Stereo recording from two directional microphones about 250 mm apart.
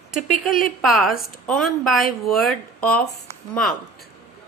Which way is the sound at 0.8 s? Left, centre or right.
Centre.